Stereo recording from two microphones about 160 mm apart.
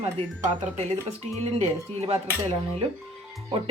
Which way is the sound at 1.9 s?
40° right (ahead or behind).